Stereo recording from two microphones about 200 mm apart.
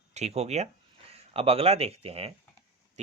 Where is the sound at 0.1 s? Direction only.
35° right (ahead or behind).